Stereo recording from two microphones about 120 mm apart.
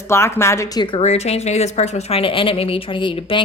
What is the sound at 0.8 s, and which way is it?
Speech, 45° left (ahead or behind).